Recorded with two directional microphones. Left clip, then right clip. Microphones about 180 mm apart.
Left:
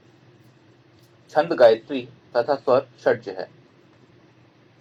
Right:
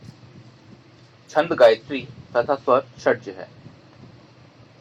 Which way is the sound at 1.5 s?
20° left (ahead or behind).